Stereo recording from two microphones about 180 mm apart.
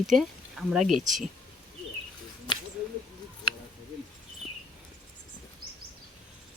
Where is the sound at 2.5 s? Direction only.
25° left (ahead or behind).